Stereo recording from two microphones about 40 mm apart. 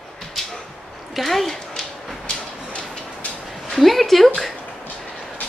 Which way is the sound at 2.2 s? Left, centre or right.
Left.